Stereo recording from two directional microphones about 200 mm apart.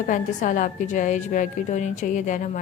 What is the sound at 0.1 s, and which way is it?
A woman's voice, 40° left (ahead or behind).